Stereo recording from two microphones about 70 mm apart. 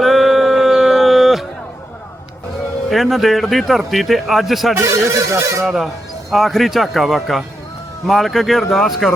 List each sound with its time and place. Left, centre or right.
0.0 s music: centre
2.9 s a man's voice: centre
4.8 s speech: right
5.6 s a man's voice: centre